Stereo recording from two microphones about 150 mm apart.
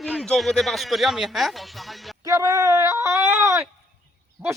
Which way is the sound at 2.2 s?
20° right (ahead or behind).